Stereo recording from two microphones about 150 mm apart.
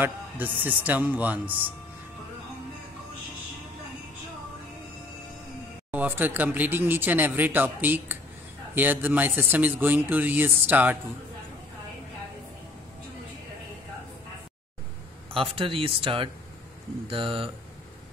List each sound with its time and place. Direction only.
0.0 s speech: 10° right (ahead or behind)
5.9 s speech: 10° right (ahead or behind)
15.3 s speech: 35° right (ahead or behind)